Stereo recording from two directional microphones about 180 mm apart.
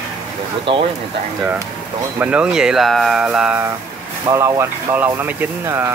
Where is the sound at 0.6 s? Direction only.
30° right (ahead or behind).